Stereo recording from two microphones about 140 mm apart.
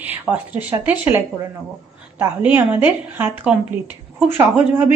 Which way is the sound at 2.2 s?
15° right (ahead or behind).